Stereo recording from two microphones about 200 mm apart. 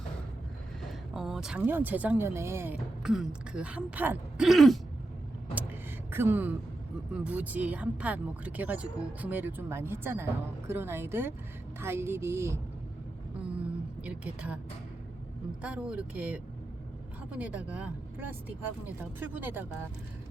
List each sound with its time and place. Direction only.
1.1 s speech: centre (ahead or behind)
6.1 s speech: 10° right (ahead or behind)
14.0 s speech: 5° right (ahead or behind)
15.6 s speech: 5° right (ahead or behind)